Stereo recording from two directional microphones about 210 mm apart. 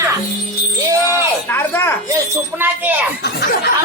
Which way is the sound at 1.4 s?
10° left (ahead or behind).